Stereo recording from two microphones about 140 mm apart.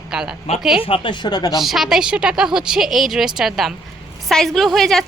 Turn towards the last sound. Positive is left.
turn(degrees=0)  # may be behind; listen again after turning